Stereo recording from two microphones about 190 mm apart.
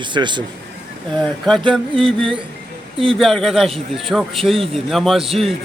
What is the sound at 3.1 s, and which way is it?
A man's voice, centre (ahead or behind).